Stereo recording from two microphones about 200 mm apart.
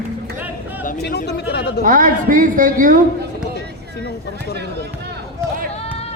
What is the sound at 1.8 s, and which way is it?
A woman's voice, 40° right (ahead or behind).